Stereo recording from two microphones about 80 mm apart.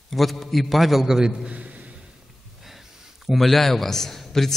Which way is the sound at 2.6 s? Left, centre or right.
Centre.